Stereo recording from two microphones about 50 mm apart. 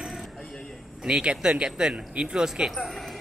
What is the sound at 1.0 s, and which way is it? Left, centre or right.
Speech, centre.